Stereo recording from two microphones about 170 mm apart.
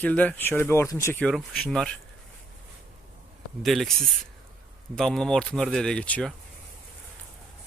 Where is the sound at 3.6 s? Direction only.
Centre (ahead or behind).